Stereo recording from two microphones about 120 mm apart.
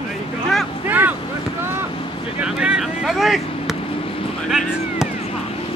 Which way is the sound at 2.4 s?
10° right (ahead or behind).